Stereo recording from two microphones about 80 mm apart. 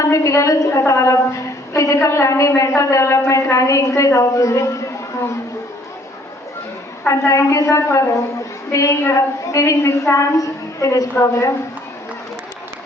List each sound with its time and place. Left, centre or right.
0.0 s a woman's voice: left
7.1 s a woman's voice: left